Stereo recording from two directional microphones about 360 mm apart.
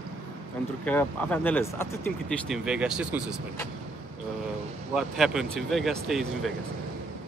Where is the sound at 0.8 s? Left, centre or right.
Centre.